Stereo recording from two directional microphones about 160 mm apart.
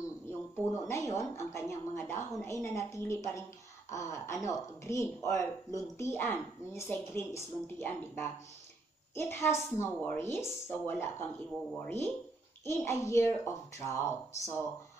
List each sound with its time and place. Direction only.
0.6 s speech: 15° left (ahead or behind)
9.1 s speech: 15° left (ahead or behind)